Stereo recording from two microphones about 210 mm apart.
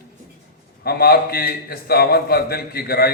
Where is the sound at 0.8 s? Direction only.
50° left (ahead or behind).